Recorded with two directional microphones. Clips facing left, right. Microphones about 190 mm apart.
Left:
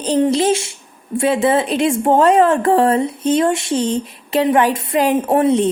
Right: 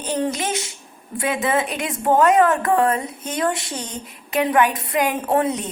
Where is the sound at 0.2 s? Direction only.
30° left (ahead or behind).